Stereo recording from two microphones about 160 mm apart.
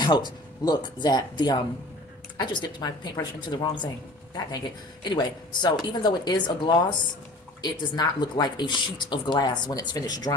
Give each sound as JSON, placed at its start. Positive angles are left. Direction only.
{"t": 0.0, "sound": "speech", "side_deg": 25}